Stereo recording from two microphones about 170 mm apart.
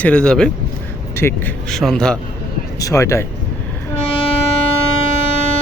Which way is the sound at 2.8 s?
20° left (ahead or behind).